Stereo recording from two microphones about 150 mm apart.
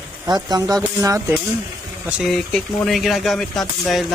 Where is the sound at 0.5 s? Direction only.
30° right (ahead or behind).